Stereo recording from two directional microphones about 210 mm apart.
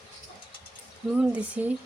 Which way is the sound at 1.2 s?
5° right (ahead or behind).